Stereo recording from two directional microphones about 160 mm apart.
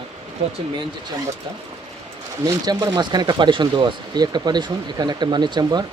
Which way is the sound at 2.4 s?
25° right (ahead or behind).